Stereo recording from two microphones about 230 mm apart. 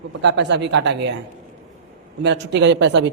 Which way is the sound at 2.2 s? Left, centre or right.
Right.